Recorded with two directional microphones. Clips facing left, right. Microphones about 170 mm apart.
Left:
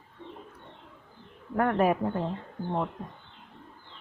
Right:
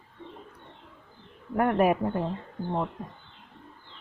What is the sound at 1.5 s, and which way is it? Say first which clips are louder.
Speech: right 1 dB; 15° right (ahead or behind).